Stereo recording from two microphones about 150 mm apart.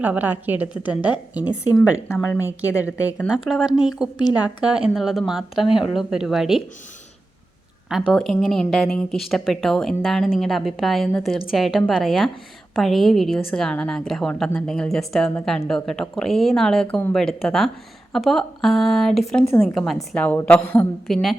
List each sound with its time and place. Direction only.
0.0 s a woman's voice: 10° right (ahead or behind)
2.4 s a woman's voice: 20° left (ahead or behind)
3.2 s a woman's voice: 5° right (ahead or behind)
8.1 s a woman's voice: centre (ahead or behind)
21.1 s a woman's voice: centre (ahead or behind)